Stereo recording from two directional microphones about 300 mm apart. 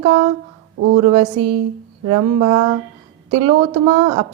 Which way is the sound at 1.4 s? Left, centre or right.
Centre.